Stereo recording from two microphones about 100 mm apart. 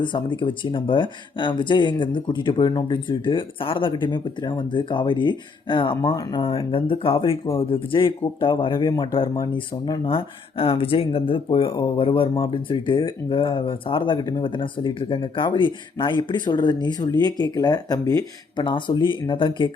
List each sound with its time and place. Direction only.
0.0 s speech: 55° left (ahead or behind)
9.5 s speech: 50° left (ahead or behind)
12.5 s speech: 50° left (ahead or behind)
18.6 s speech: 50° left (ahead or behind)